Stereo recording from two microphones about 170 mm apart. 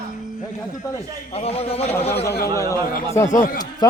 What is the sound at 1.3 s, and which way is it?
Speech, 35° left (ahead or behind).